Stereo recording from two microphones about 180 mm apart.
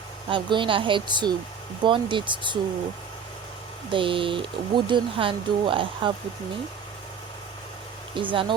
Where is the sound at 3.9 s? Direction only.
30° right (ahead or behind).